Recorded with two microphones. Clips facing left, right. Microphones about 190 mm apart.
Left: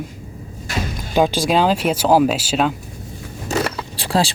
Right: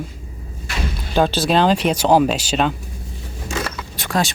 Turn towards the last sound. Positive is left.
turn(degrees=30)  # may be behind; listen again after turning